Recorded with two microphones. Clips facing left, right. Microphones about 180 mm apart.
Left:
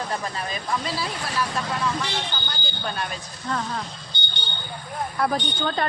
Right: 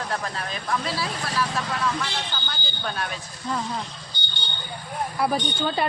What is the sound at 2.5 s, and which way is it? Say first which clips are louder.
Speech: left 1 dB; centre (ahead or behind).